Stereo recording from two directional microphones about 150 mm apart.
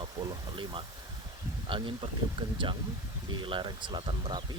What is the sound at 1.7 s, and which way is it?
Speech, 35° right (ahead or behind).